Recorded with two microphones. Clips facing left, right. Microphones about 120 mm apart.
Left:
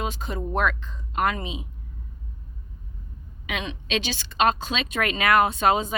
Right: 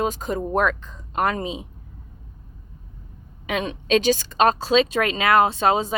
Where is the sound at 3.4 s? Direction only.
40° right (ahead or behind).